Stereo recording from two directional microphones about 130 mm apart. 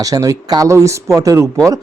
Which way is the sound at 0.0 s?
25° right (ahead or behind).